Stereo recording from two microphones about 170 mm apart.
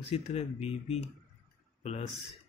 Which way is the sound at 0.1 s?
35° left (ahead or behind).